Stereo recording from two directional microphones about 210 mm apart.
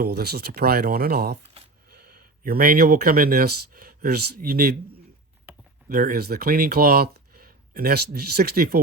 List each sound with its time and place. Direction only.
0.0 s speech: 50° right (ahead or behind)
5.9 s speech: 45° right (ahead or behind)